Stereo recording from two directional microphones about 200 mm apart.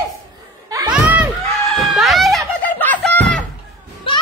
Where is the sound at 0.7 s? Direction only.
15° right (ahead or behind).